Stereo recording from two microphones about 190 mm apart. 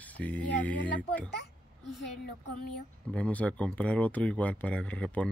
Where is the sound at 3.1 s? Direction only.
5° left (ahead or behind).